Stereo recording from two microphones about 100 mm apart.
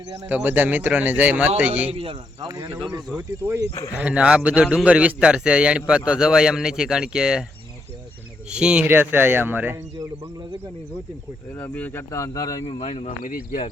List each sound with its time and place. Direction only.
0.3 s a man's voice: 15° right (ahead or behind)
1.9 s speech: 65° right (ahead or behind)
3.2 s speech: 30° right (ahead or behind)
3.9 s a man's voice: 10° right (ahead or behind)
8.4 s a man's voice: 10° right (ahead or behind)
11.5 s speech: 15° left (ahead or behind); by 12.6 s 35° left (ahead or behind)
12.6 s speech: 85° left